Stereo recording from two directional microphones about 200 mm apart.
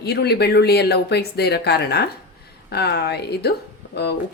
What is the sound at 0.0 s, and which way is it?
Speech, 55° left (ahead or behind).